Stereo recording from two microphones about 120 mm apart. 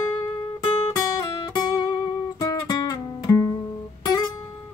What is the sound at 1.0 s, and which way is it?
Music, 35° left (ahead or behind).